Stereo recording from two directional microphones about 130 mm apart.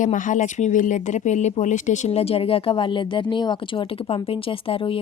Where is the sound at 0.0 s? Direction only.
80° left.